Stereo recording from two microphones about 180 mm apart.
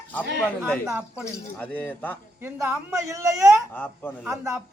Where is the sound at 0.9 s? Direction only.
5° right (ahead or behind).